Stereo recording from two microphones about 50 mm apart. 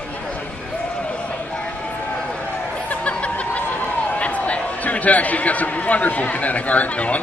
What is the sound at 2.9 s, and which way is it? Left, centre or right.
Snicker, left.